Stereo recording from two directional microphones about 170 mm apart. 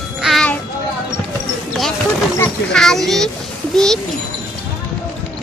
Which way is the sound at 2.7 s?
5° left (ahead or behind).